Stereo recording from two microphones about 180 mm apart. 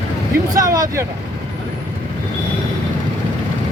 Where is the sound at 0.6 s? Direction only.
20° right (ahead or behind).